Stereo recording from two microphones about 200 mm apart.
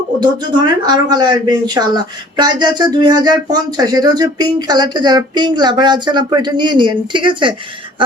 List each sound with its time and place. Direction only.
0.2 s speech: 20° right (ahead or behind)